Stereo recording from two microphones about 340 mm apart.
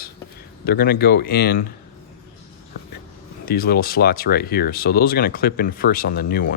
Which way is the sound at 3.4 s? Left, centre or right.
Left.